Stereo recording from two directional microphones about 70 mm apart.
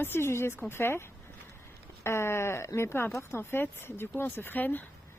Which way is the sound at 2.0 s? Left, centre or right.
Left.